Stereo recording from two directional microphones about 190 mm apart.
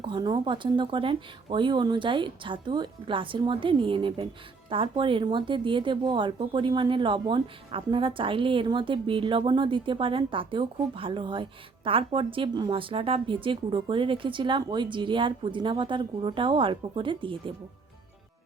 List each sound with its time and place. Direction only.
0.0 s speech: 25° right (ahead or behind)